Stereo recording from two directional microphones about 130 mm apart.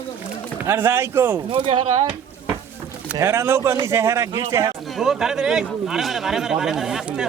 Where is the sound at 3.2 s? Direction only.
20° right (ahead or behind).